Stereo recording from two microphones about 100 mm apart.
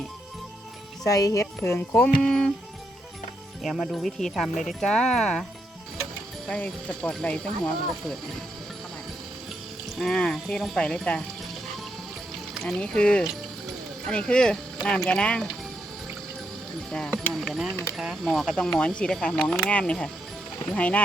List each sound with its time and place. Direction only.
1.0 s speech: 35° left (ahead or behind)
2.2 s speech: 5° left (ahead or behind)
3.6 s speech: centre (ahead or behind)
6.5 s speech: 10° left (ahead or behind)
9.9 s speech: centre (ahead or behind)
10.8 s speech: 10° left (ahead or behind)
12.5 s speech: 5° left (ahead or behind)
16.9 s speech: 10° left (ahead or behind)